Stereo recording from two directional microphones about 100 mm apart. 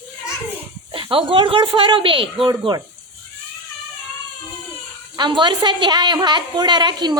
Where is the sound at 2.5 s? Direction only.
40° right (ahead or behind).